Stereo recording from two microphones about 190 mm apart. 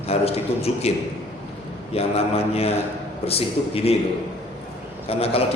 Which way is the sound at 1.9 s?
30° left (ahead or behind).